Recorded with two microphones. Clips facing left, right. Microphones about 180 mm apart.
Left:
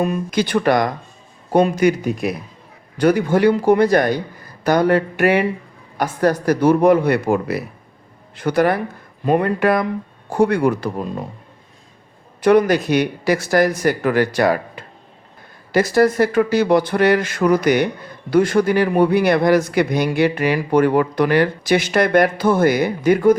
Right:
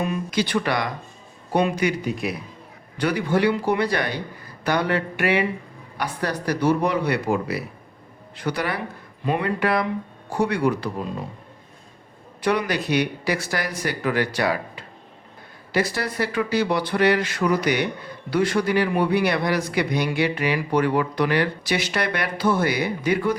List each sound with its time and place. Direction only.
0.0 s speech: 45° left (ahead or behind)
12.4 s speech: 45° left (ahead or behind)